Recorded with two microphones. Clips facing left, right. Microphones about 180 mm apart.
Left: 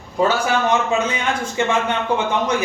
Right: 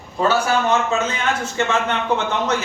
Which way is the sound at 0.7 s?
15° left (ahead or behind).